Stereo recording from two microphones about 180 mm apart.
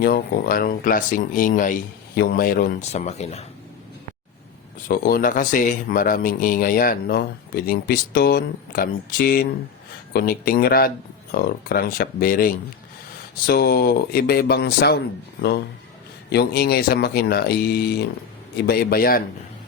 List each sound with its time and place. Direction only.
0.0 s speech: 55° left (ahead or behind)
2.9 s speech: 40° left (ahead or behind)
4.9 s speech: 55° left (ahead or behind)